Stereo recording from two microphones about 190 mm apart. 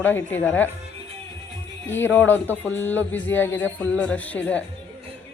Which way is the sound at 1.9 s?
10° left (ahead or behind).